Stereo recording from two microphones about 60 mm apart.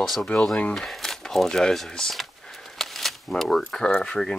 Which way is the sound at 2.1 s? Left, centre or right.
Centre.